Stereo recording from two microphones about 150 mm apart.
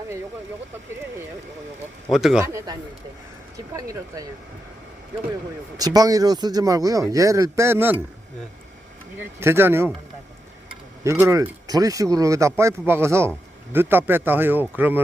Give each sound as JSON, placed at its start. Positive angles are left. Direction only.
{"t": 2.0, "sound": "speech", "side_deg": 0}
{"t": 2.4, "sound": "speech", "side_deg": -20}
{"t": 3.8, "sound": "speech", "side_deg": -20}
{"t": 5.7, "sound": "speech", "side_deg": -25}
{"t": 9.4, "sound": "speech", "side_deg": -15}
{"t": 11.0, "sound": "speech", "side_deg": -20}